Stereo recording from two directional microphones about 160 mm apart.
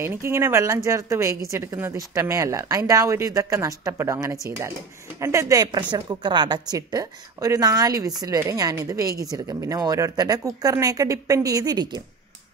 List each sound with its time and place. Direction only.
0.0 s a woman's voice: 15° right (ahead or behind)